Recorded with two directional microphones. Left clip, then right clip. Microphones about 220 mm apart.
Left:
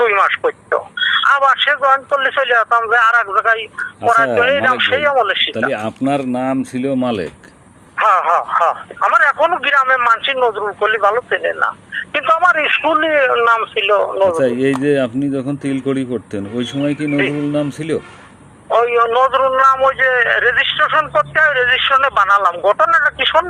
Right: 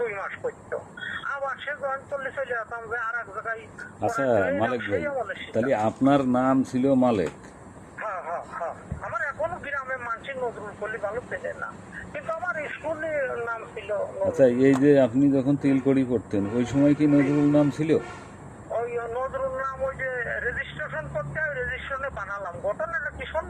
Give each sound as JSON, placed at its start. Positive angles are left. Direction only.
{"t": 0.0, "sound": "a man's voice", "side_deg": 55}
{"t": 6.0, "sound": "speech", "side_deg": 40}
{"t": 6.6, "sound": "speech", "side_deg": 20}
{"t": 7.9, "sound": "speech", "side_deg": 55}
{"t": 14.3, "sound": "speech", "side_deg": 25}
{"t": 18.7, "sound": "a man's voice", "side_deg": 55}